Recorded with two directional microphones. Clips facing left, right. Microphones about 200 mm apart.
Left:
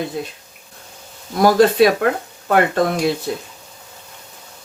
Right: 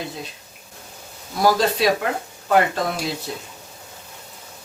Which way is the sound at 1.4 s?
55° left (ahead or behind).